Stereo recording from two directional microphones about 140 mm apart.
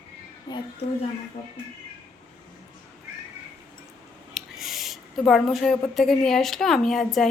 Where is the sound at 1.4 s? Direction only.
40° left (ahead or behind).